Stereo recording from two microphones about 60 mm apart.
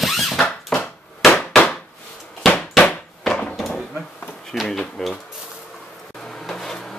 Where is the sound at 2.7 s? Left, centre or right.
Centre.